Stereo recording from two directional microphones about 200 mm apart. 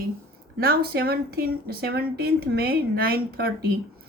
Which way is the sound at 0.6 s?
50° right (ahead or behind).